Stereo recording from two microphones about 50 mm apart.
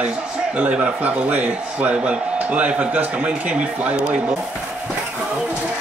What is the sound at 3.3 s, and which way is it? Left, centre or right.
Speech, right.